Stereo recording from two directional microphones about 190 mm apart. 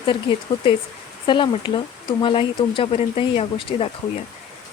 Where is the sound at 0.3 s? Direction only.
30° left (ahead or behind).